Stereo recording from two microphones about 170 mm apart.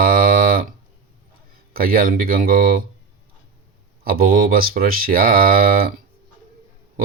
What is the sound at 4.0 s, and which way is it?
Speech, 60° right (ahead or behind).